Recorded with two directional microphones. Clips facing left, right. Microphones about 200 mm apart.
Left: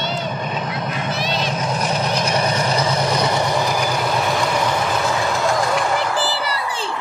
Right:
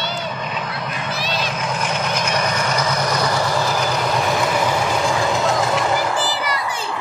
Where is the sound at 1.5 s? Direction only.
35° left (ahead or behind); by 5.2 s 10° right (ahead or behind).